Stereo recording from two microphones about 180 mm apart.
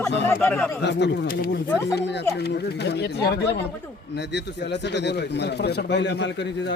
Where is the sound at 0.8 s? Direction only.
75° left (ahead or behind).